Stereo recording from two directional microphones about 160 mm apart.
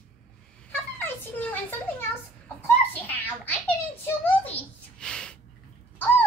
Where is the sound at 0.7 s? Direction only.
10° left (ahead or behind).